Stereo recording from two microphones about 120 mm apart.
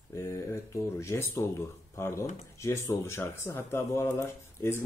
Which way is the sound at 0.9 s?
25° left (ahead or behind).